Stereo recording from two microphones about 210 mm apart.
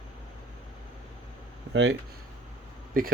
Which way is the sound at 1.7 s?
55° right (ahead or behind).